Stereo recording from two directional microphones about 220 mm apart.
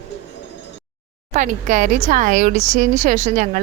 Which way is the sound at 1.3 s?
35° right (ahead or behind).